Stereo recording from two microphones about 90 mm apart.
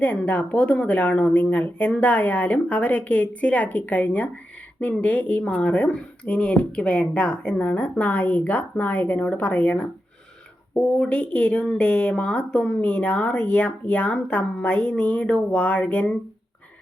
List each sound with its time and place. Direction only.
0.0 s speech: 15° left (ahead or behind)
10.9 s speech: 15° left (ahead or behind)